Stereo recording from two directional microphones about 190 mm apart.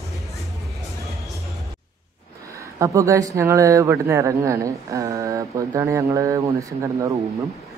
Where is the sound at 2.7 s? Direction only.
15° right (ahead or behind).